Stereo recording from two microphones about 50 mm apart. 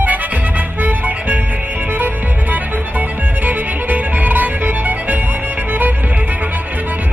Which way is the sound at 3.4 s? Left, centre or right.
Right.